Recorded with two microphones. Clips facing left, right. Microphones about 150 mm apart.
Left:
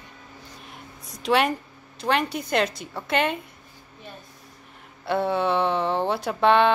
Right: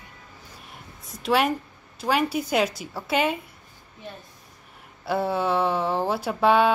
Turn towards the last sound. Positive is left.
turn(degrees=-5)  # may be behind; listen again after turning